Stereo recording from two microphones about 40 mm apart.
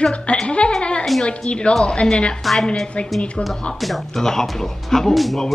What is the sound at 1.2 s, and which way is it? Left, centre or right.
Speech, left.